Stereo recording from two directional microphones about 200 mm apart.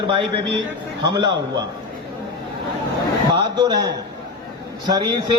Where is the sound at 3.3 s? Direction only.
20° right (ahead or behind).